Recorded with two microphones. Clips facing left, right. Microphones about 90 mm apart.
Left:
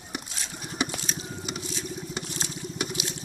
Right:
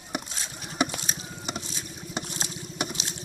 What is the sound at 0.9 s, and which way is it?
Crushing, 20° right (ahead or behind).